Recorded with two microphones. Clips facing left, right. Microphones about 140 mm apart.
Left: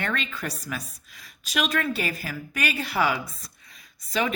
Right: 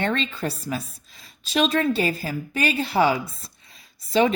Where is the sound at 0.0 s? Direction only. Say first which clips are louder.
Right 5 dB; 30° right (ahead or behind).